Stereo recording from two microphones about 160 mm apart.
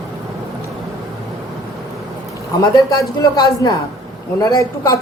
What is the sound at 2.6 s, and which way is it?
Speech, 25° left (ahead or behind).